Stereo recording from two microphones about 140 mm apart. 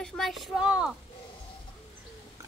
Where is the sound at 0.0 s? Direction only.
5° left (ahead or behind).